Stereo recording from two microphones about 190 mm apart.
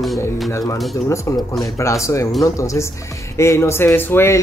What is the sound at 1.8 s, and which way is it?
Speech, 15° left (ahead or behind).